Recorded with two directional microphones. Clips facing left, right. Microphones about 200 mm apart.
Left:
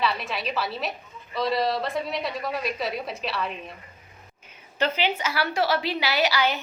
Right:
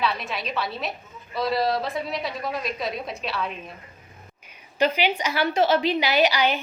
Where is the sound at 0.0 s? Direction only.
Centre (ahead or behind).